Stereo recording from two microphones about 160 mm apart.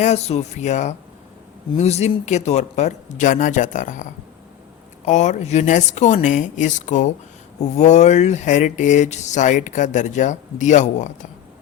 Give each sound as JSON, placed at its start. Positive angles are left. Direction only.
{"t": 0.0, "sound": "speech", "side_deg": 45}
{"t": 5.0, "sound": "speech", "side_deg": 50}